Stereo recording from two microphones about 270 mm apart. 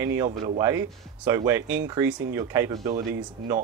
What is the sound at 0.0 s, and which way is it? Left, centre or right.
Speech, centre.